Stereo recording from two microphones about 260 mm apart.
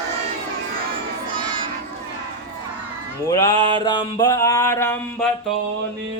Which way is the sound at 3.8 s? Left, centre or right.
Centre.